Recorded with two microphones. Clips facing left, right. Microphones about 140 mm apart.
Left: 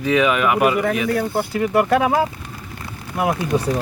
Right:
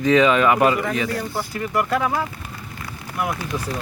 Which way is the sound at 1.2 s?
60° left (ahead or behind).